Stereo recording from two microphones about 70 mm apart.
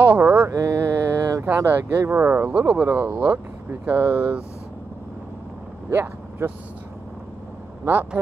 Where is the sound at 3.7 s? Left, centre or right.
Right.